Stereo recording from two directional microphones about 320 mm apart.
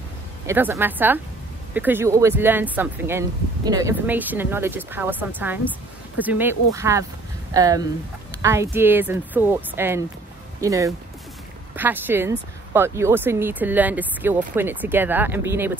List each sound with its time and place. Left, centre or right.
0.5 s a woman's voice: centre